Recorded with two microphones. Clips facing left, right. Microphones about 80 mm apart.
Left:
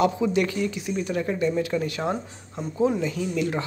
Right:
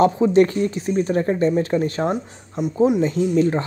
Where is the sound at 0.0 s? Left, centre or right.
Right.